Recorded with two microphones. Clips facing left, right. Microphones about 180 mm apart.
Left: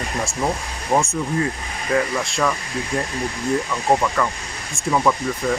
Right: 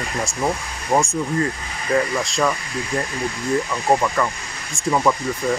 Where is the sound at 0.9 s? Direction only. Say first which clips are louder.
Right 1 dB; centre (ahead or behind).